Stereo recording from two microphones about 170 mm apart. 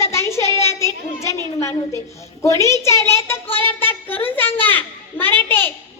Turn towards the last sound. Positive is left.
turn(degrees=10)  # may be behind; listen again after turning